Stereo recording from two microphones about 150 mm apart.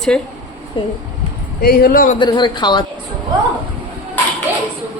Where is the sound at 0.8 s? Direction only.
35° left (ahead or behind).